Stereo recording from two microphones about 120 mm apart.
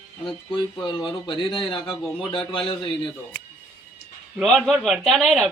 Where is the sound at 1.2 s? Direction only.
40° left (ahead or behind).